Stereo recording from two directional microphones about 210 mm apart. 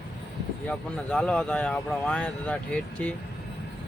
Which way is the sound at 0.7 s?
5° left (ahead or behind).